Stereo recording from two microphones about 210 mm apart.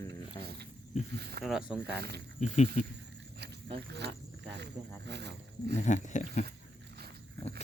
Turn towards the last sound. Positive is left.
turn(degrees=35)  # may be behind; listen again after turning